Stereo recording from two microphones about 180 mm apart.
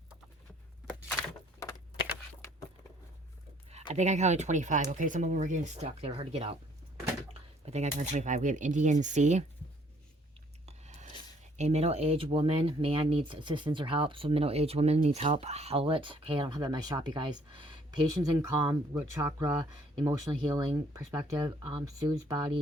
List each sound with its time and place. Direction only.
1.6 s keys jangling: 15° left (ahead or behind)
3.9 s speech: 40° right (ahead or behind)
7.6 s speech: 40° right (ahead or behind)
10.7 s a sound: 40° right (ahead or behind)
11.5 s speech: 40° right (ahead or behind); by 18.8 s 20° right (ahead or behind)
18.9 s speech: 10° right (ahead or behind)